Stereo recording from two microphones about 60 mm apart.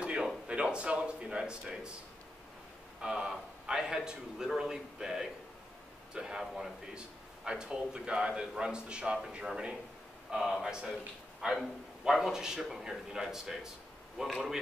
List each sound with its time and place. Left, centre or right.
0.0 s a sound: centre
0.5 s speech: centre
3.0 s a man's voice: centre
7.4 s a man's voice: centre